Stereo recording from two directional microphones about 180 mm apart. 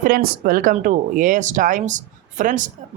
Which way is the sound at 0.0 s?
55° right (ahead or behind).